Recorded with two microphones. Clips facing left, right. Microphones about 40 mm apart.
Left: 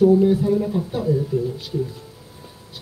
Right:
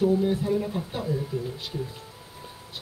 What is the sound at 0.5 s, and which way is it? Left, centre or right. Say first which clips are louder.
Speech: left 6 dB; centre.